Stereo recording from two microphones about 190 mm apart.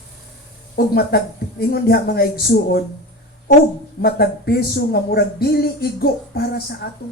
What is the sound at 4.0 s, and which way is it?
Speech, 55° left (ahead or behind).